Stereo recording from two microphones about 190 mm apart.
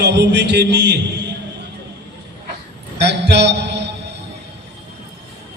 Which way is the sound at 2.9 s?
65° right (ahead or behind).